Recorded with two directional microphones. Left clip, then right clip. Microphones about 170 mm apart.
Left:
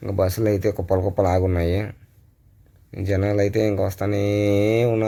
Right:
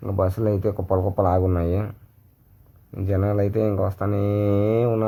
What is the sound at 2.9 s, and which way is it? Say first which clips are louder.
Speech: left 2 dB; 20° left (ahead or behind).